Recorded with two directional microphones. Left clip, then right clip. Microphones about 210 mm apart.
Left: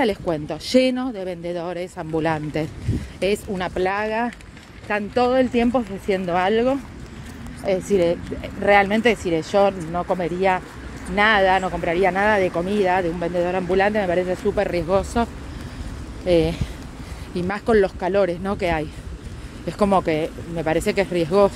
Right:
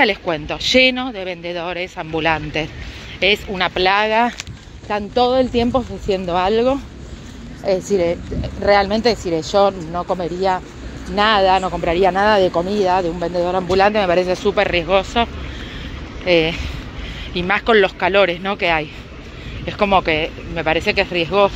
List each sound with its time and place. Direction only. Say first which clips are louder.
0.0 s speech: right 5 dB; 25° left (ahead or behind)
3.8 s speech: right 8 dB; 5° left (ahead or behind)
11.1 s speech: right 3 dB; centre (ahead or behind)
14.5 s speech: right 5 dB; 20° left (ahead or behind)
16.3 s speech: right 3 dB; 25° left (ahead or behind); by 21.5 s 40° left (ahead or behind)